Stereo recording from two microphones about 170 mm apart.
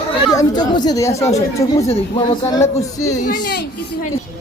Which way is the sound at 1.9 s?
30° left (ahead or behind).